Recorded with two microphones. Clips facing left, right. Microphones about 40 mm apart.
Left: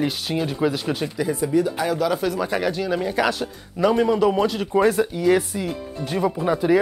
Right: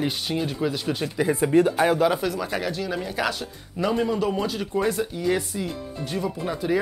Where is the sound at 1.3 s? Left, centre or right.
Right.